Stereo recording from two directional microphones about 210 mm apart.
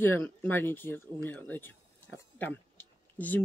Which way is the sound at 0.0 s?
10° left (ahead or behind).